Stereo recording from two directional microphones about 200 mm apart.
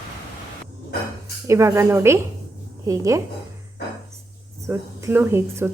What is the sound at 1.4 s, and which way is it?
Speech, 15° right (ahead or behind).